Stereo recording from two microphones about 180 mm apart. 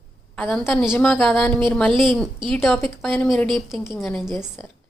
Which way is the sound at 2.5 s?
Centre (ahead or behind).